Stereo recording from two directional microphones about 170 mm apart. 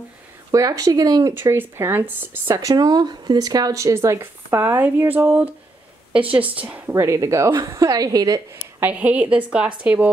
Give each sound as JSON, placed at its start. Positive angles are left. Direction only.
{"t": 0.5, "sound": "a woman's voice", "side_deg": -20}
{"t": 8.8, "sound": "speech", "side_deg": -10}